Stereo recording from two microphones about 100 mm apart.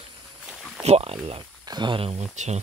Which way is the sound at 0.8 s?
85° right.